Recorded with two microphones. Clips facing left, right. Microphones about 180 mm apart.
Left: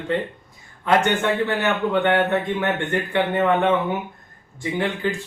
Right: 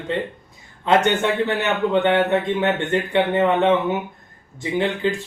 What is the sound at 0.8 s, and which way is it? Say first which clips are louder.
A man's voice: right 1 dB; 25° right (ahead or behind).